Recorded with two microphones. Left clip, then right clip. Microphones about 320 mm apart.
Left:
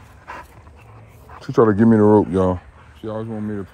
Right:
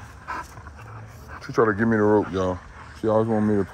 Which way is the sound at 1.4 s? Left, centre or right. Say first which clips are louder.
Left 6 dB; left.